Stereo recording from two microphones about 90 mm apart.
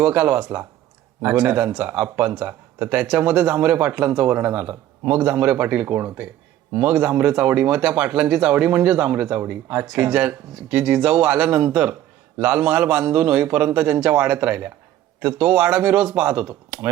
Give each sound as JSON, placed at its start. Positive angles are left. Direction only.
{"t": 0.0, "sound": "speech", "side_deg": -15}